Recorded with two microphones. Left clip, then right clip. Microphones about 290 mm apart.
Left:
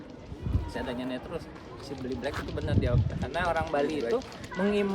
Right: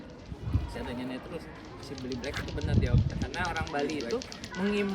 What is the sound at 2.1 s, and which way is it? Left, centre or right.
Speech, centre.